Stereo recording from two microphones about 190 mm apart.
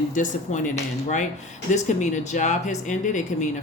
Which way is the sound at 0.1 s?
40° left (ahead or behind).